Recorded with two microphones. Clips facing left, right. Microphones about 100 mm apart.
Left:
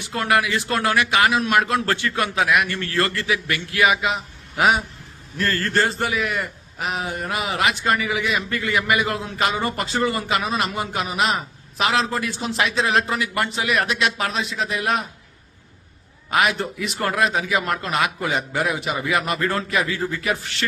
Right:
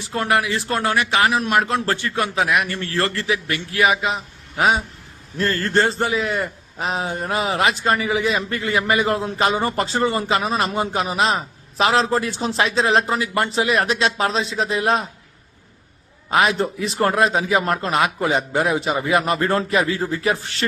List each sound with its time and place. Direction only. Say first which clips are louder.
0.1 s a man's voice: even; 30° right (ahead or behind)
16.3 s a man's voice: right 3 dB; 30° right (ahead or behind)